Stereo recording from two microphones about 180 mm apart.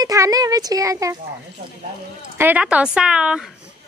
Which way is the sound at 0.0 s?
20° right (ahead or behind).